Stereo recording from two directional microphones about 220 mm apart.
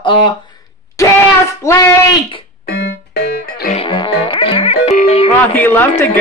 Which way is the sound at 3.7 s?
25° left (ahead or behind).